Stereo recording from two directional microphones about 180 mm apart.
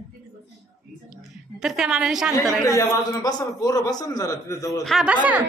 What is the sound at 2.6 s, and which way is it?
A man's voice, 15° left (ahead or behind).